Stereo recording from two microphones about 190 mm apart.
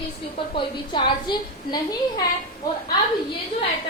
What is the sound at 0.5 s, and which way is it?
A woman's voice, 25° left (ahead or behind).